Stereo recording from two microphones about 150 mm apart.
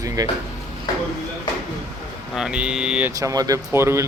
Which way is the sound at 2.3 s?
5° right (ahead or behind).